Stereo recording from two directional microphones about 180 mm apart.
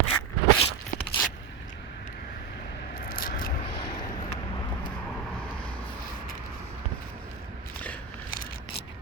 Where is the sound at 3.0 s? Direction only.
50° left (ahead or behind).